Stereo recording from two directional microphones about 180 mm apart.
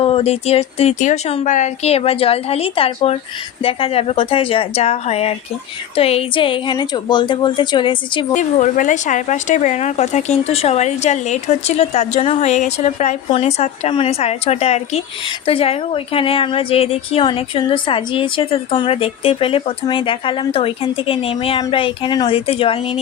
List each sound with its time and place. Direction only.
0.0 s a woman's voice: 35° left (ahead or behind)
8.3 s speech: 40° left (ahead or behind)